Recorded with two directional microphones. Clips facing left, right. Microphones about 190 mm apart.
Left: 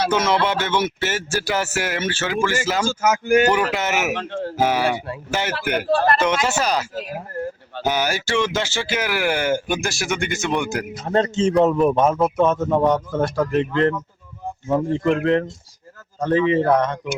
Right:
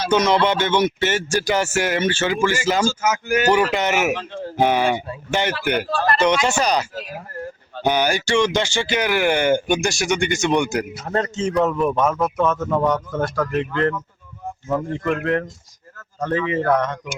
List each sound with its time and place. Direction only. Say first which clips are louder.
0.1 s speech: right 2 dB; 5° left (ahead or behind)
2.8 s speech: left 1 dB; 55° left (ahead or behind)
3.5 s speech: right 2 dB; 5° left (ahead or behind)
4.1 s speech: left 1 dB; 60° left (ahead or behind)
4.5 s speech: right 2 dB; 5° left (ahead or behind)
11.0 s a man's voice: left 7 dB; 25° left (ahead or behind)